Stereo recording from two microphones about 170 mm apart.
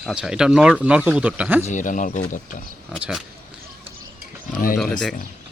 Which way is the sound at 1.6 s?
45° left (ahead or behind).